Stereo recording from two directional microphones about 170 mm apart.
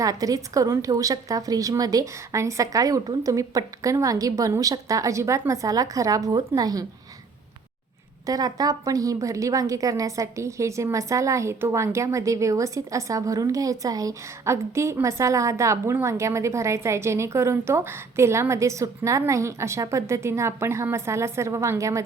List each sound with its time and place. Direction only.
0.0 s a woman's voice: 20° right (ahead or behind)
8.3 s a woman's voice: 20° right (ahead or behind)